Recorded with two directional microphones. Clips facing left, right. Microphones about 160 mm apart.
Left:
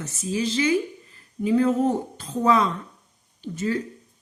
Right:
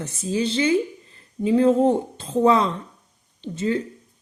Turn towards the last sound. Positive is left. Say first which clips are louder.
# right 2 dB
turn(degrees=-25)  # may be behind; listen again after turning